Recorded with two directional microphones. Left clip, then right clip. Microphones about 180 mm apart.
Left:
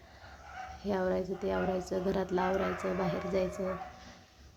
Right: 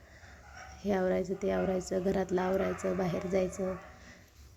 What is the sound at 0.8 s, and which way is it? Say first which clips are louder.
A woman's voice: right 2 dB; 15° right (ahead or behind).